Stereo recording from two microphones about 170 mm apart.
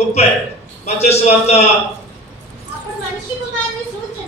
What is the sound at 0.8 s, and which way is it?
Speech, 40° left (ahead or behind).